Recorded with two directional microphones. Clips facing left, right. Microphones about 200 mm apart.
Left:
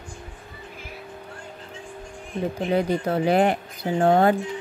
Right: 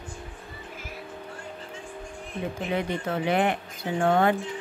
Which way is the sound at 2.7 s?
35° left (ahead or behind).